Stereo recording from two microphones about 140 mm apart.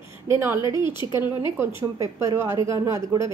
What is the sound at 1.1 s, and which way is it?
A woman's voice, 20° right (ahead or behind).